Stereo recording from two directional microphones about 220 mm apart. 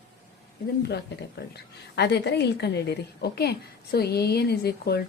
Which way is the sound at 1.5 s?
50° left (ahead or behind).